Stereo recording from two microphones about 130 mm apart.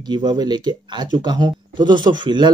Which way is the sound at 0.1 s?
35° right (ahead or behind).